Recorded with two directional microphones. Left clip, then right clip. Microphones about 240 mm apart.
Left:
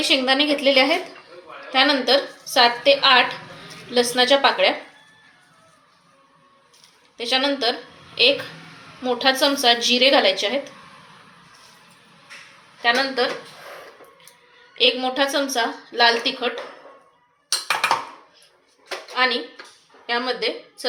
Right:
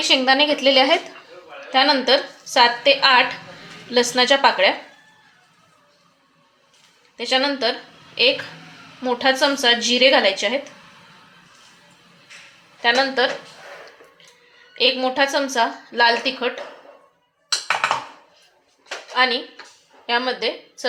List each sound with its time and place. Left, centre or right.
0.1 s a woman's voice: right
7.2 s a woman's voice: right
9.0 s a woman's voice: right
12.8 s a woman's voice: right
14.8 s a woman's voice: right
19.1 s a woman's voice: right